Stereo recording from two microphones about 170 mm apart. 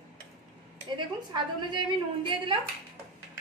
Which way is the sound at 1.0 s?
25° right (ahead or behind).